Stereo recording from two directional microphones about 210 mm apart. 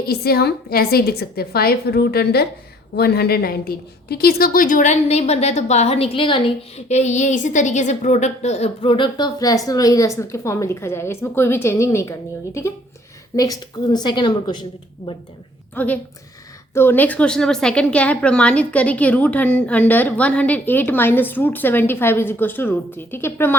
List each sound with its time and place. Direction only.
0.0 s a woman's voice: 45° left (ahead or behind); by 12.1 s 15° left (ahead or behind)
13.3 s a woman's voice: 15° left (ahead or behind)
15.7 s a woman's voice: 10° left (ahead or behind)